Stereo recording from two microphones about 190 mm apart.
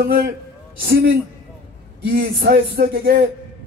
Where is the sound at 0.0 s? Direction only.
55° right (ahead or behind).